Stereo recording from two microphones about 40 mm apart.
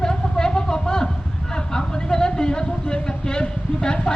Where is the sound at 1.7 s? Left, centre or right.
Centre.